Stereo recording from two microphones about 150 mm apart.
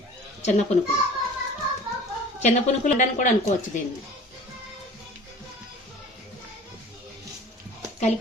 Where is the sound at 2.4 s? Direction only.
55° left (ahead or behind).